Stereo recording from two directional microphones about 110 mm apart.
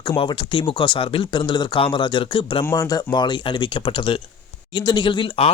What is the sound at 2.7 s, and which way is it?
Speech, 35° left (ahead or behind).